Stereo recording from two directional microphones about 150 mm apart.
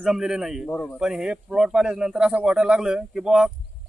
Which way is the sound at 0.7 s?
10° left (ahead or behind).